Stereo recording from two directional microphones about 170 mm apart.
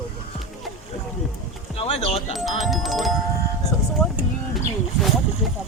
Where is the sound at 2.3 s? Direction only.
Centre (ahead or behind).